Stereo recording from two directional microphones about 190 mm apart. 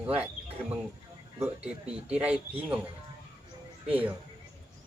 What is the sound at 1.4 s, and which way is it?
Speech, 5° right (ahead or behind).